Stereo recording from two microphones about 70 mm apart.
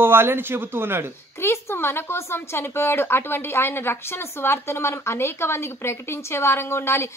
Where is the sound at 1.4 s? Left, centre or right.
Left.